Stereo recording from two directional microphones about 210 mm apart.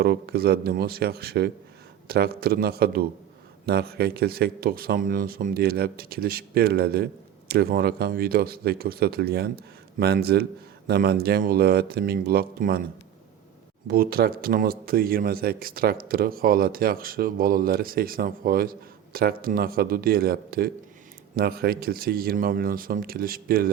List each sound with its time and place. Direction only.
0.0 s speech: 50° right (ahead or behind)
13.8 s speech: 45° right (ahead or behind)